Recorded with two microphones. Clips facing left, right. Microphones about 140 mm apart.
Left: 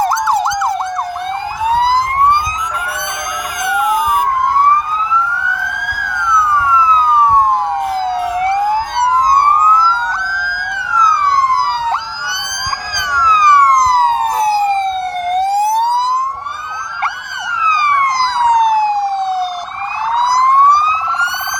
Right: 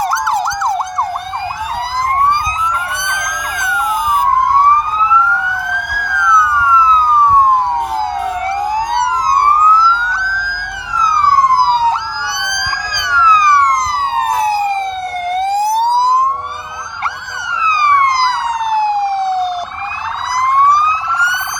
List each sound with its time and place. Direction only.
3.8 s emergency vehicle: 60° left (ahead or behind)
9.0 s emergency vehicle: 55° left (ahead or behind)
10.9 s emergency vehicle: 50° left (ahead or behind); by 11.9 s 65° left (ahead or behind)
13.0 s police car: 45° left (ahead or behind)
13.9 s emergency vehicle: 40° left (ahead or behind)
15.4 s emergency vehicle: 15° left (ahead or behind)
20.1 s emergency vehicle: 35° left (ahead or behind)